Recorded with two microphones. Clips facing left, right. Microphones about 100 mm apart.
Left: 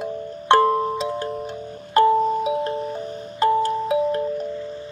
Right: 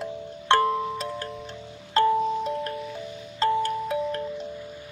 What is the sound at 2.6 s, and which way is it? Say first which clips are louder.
Music: left 7 dB; 35° left (ahead or behind).